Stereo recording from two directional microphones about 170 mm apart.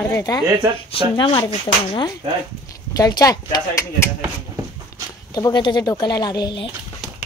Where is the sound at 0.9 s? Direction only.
30° left (ahead or behind).